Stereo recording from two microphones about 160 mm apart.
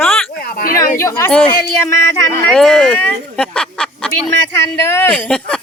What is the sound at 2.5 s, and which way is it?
Speech, 5° left (ahead or behind).